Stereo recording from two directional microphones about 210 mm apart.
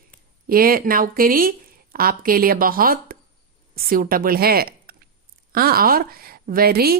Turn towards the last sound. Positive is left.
turn(degrees=-45)  # may be behind; listen again after turning